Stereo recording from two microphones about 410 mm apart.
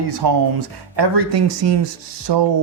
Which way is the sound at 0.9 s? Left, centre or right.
Right.